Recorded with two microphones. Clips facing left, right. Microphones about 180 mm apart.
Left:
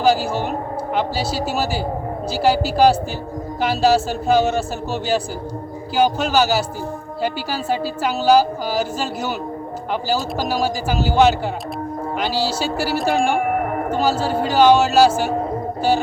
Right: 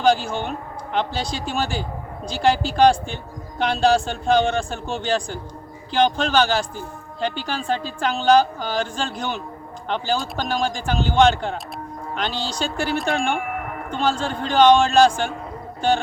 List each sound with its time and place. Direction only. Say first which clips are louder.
0.0 s a man's voice: left 2 dB; 5° left (ahead or behind)
13.3 s music: left 7 dB; 40° left (ahead or behind)
14.0 s a woman's voice: left 2 dB; 5° left (ahead or behind)